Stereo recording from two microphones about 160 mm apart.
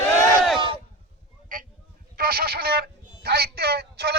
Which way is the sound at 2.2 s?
70° right (ahead or behind).